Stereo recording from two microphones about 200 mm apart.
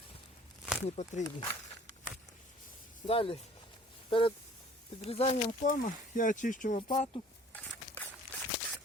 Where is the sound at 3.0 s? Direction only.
25° left (ahead or behind).